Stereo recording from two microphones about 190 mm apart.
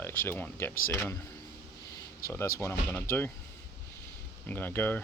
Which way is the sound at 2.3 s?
15° left (ahead or behind).